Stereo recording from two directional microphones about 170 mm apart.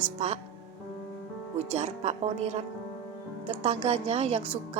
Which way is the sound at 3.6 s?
40° right (ahead or behind).